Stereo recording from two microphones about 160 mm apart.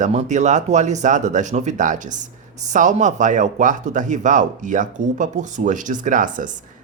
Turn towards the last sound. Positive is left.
turn(degrees=-55)  # may be behind; listen again after turning